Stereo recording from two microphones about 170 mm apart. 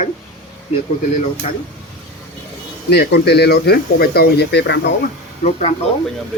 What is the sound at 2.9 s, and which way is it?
Speech, 75° left (ahead or behind).